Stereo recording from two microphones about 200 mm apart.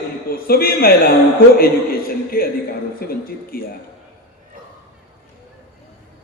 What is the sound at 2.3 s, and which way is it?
A man's voice, 50° left (ahead or behind).